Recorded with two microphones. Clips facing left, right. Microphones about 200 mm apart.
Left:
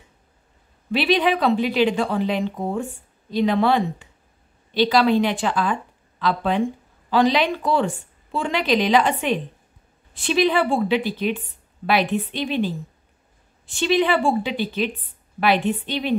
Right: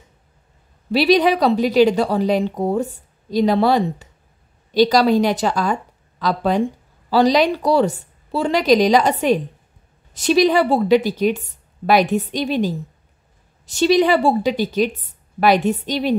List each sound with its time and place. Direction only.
0.9 s a woman's voice: 40° right (ahead or behind)